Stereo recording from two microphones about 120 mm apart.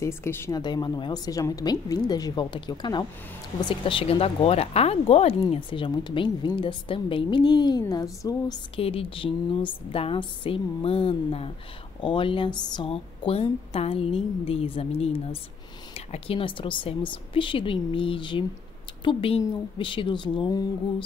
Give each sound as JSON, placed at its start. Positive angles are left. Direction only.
{"t": 0.0, "sound": "a woman's voice", "side_deg": 20}
{"t": 0.5, "sound": "a woman's voice", "side_deg": 35}
{"t": 5.5, "sound": "a woman's voice", "side_deg": 45}
{"t": 8.7, "sound": "speech", "side_deg": 50}
{"t": 12.9, "sound": "a woman's voice", "side_deg": 55}